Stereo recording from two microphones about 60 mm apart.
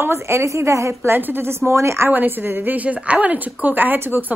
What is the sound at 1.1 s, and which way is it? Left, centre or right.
A woman's voice, right.